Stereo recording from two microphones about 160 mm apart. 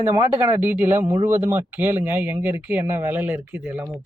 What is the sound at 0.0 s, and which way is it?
Speech, 15° right (ahead or behind).